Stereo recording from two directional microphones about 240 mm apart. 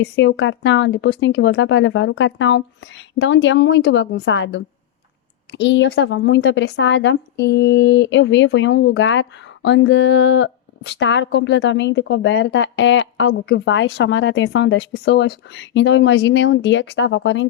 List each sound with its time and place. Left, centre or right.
0.0 s a woman's voice: left